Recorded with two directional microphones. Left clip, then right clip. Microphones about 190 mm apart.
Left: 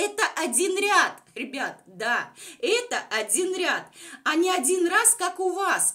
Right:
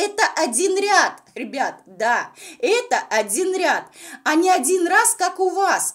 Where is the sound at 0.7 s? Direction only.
15° right (ahead or behind).